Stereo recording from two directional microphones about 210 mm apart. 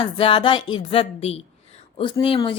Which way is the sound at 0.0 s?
25° left (ahead or behind).